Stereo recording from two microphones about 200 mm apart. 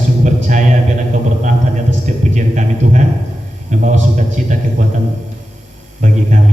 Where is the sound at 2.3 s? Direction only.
35° right (ahead or behind).